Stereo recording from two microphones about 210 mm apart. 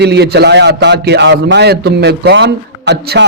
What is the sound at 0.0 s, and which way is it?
A man's voice, 50° right (ahead or behind).